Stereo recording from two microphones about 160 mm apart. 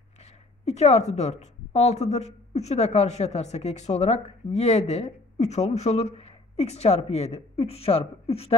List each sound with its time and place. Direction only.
0.2 s a woman's voice: 40° left (ahead or behind)